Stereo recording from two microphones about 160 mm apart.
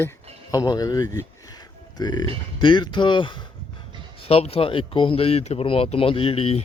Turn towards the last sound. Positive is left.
turn(degrees=35)  # may be behind; listen again after turning